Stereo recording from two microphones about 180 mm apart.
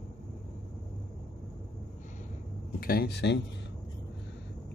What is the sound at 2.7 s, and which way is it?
Speech, 55° left (ahead or behind).